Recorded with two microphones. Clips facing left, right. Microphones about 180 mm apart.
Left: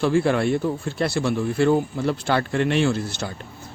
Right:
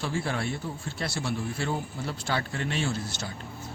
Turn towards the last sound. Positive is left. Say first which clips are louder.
# left 9 dB
turn(degrees=70)  # may be behind; listen again after turning